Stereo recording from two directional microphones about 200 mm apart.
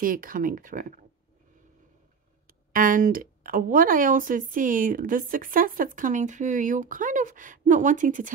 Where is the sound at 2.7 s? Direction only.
40° right (ahead or behind).